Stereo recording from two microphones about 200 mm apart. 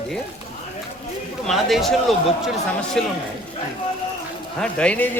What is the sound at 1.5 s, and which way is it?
Speech, centre (ahead or behind).